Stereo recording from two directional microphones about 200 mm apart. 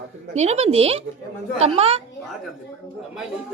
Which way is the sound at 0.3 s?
35° right (ahead or behind).